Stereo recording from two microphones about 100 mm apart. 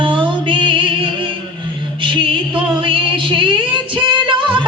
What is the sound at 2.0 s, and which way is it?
Music, 55° right (ahead or behind).